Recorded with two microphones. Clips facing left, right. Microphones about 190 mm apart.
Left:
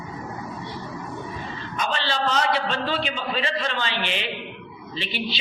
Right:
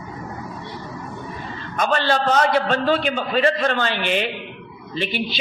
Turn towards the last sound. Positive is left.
turn(degrees=-50)  # may be behind; listen again after turning